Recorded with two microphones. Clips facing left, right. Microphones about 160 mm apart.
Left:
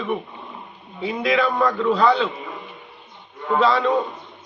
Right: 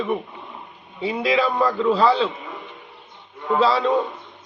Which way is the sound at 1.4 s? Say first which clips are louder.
Even; 10° right (ahead or behind).